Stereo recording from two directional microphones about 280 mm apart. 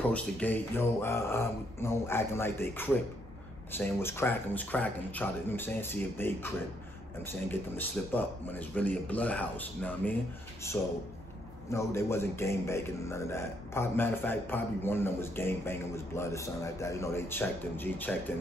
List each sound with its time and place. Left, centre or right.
0.1 s a man's voice: centre
11.7 s a man's voice: centre